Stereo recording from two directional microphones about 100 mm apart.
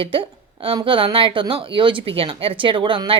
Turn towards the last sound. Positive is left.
turn(degrees=-60)  # may be behind; listen again after turning